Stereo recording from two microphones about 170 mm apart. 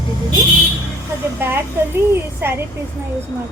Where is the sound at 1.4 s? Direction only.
15° right (ahead or behind).